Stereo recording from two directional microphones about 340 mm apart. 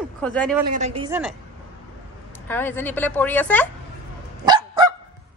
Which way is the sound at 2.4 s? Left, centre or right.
Centre.